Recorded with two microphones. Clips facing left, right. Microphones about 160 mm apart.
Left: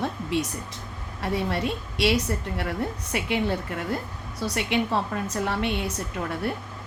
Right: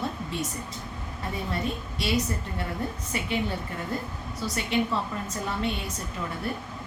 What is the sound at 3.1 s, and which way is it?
Speech, 70° left (ahead or behind).